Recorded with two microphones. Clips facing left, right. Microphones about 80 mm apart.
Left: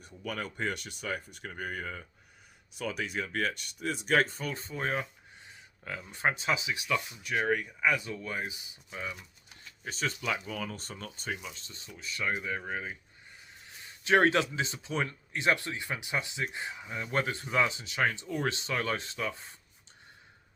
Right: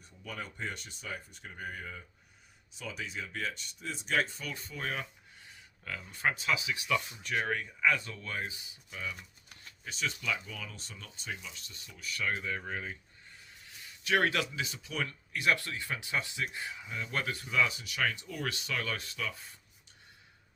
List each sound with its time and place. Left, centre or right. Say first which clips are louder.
0.0 s speech: left 5 dB; left
4.5 s speech: left 4 dB; left
7.2 s speech: left 4 dB; centre
8.9 s speech: left 2 dB; left
11.3 s speech: left 3 dB; left
13.7 s speech: left 5 dB; left